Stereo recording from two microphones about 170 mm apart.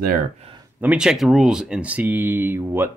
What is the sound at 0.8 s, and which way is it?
Speech, 5° right (ahead or behind).